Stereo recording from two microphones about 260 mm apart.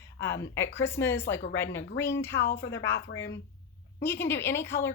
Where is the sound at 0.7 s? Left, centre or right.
Centre.